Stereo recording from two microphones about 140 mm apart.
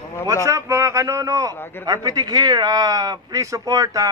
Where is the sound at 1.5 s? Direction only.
15° left (ahead or behind).